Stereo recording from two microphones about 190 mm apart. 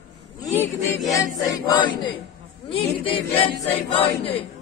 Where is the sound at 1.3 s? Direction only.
20° left (ahead or behind).